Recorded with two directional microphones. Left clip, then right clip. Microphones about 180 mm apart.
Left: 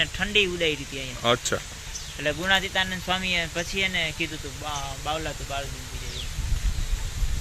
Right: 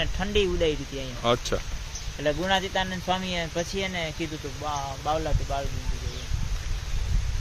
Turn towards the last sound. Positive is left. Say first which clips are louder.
# right 2 dB
turn(degrees=-20)  # may be behind; listen again after turning